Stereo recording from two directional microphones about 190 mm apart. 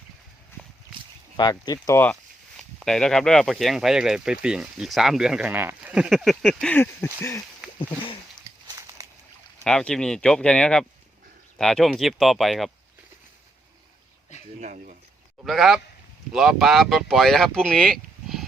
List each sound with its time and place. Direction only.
0.5 s a sound: 10° left (ahead or behind)
1.4 s speech: 20° left (ahead or behind)
7.8 s speech: 30° left (ahead or behind)
8.6 s a sound: 20° right (ahead or behind)
9.6 s speech: 5° left (ahead or behind)
14.6 s speech: 45° right (ahead or behind)
15.4 s speech: centre (ahead or behind)